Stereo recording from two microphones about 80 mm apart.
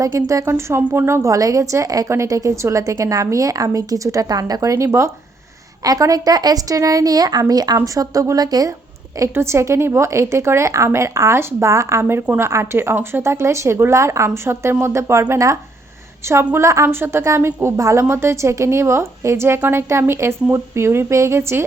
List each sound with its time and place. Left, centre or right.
0.3 s a woman's voice: right
5.8 s a woman's voice: right
9.3 s a woman's voice: right